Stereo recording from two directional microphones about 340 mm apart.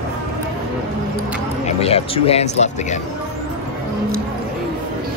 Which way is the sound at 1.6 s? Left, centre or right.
Centre.